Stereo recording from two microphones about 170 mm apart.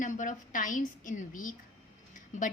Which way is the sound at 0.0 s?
50° left (ahead or behind).